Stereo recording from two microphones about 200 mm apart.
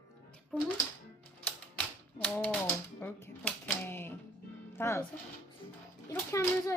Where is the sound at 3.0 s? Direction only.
10° left (ahead or behind).